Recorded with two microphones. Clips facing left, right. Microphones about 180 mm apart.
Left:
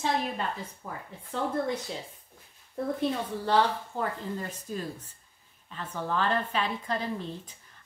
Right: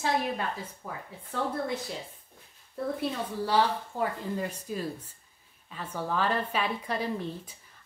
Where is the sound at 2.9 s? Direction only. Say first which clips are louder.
Left 2 dB; 10° right (ahead or behind).